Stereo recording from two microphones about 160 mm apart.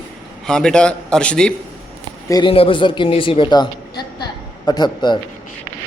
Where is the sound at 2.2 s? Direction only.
20° left (ahead or behind).